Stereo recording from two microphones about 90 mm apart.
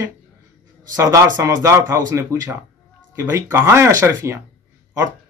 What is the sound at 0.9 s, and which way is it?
Speech, 30° right (ahead or behind).